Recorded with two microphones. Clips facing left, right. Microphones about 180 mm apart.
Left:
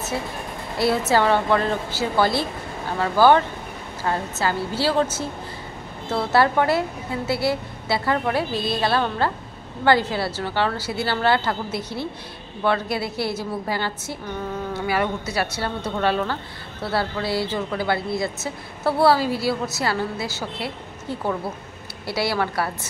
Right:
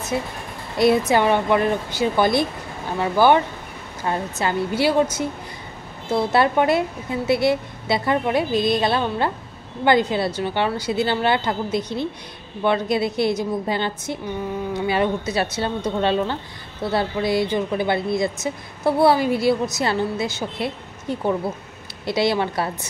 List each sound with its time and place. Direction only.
0.7 s a woman's voice: 15° right (ahead or behind)
6.1 s a woman's voice: 20° right (ahead or behind)